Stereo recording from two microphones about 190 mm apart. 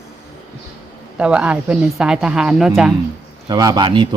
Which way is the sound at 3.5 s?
20° right (ahead or behind).